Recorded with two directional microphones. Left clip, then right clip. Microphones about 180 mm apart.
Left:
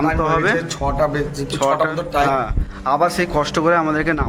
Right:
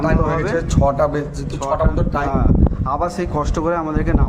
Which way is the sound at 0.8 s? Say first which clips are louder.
Right 2 dB; 70° right (ahead or behind).